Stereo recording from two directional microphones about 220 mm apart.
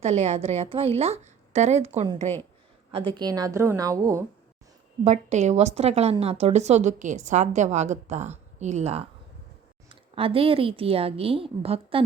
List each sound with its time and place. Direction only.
0.0 s a woman's voice: 30° right (ahead or behind)
2.9 s a woman's voice: 25° right (ahead or behind)
5.0 s a woman's voice: 30° right (ahead or behind)